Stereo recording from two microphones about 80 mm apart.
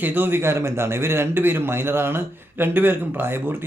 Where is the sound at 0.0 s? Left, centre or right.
Right.